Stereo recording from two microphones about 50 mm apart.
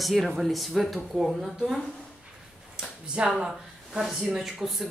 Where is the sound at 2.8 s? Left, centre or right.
Centre.